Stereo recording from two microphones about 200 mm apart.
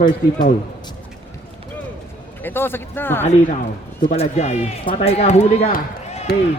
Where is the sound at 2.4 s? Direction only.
10° left (ahead or behind).